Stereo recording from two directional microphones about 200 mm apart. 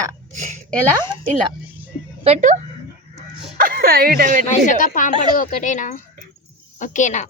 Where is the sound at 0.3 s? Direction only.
35° right (ahead or behind).